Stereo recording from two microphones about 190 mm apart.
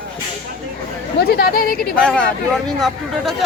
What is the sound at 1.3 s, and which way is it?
Speech, 55° left (ahead or behind).